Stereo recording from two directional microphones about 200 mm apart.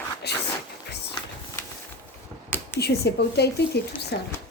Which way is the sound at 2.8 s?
55° left (ahead or behind).